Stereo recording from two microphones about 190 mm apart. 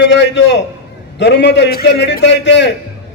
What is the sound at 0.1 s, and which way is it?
A man's voice, 65° left (ahead or behind).